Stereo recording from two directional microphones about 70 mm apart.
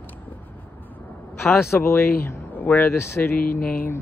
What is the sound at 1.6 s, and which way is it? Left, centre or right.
Speech, left.